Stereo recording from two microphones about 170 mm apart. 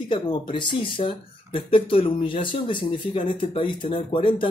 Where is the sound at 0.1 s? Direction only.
30° left (ahead or behind).